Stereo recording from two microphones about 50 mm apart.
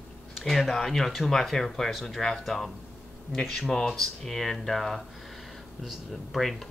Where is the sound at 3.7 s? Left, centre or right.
Centre.